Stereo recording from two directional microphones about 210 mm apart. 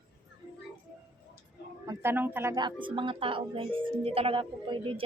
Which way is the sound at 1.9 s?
10° right (ahead or behind).